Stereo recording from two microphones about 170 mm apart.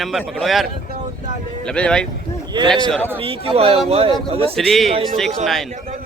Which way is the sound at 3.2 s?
35° right (ahead or behind).